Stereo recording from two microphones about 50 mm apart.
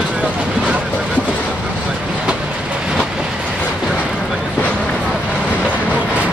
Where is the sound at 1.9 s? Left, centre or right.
Right.